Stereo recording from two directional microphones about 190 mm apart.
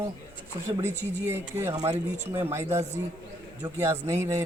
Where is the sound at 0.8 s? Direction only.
10° right (ahead or behind).